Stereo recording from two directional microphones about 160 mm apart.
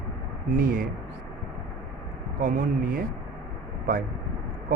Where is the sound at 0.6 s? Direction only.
60° right (ahead or behind).